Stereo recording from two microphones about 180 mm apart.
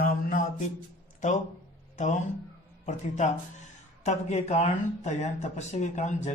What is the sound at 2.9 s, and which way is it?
Speech, 40° left (ahead or behind).